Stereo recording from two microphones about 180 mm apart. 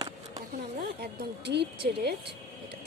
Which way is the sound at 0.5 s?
60° right (ahead or behind).